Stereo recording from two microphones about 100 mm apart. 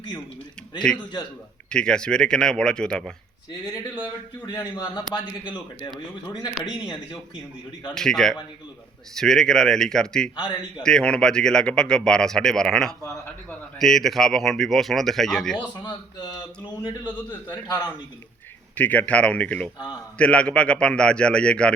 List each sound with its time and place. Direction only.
0.9 s speech: 10° left (ahead or behind)
4.4 s a man's voice: 45° left (ahead or behind)
6.7 s speech: 5° right (ahead or behind)
7.9 s speech: 5° left (ahead or behind)
10.3 s a man's voice: 55° left (ahead or behind)
10.8 s speech: 10° left (ahead or behind)
15.9 s a man's voice: 45° left (ahead or behind)
18.7 s speech: 15° left (ahead or behind)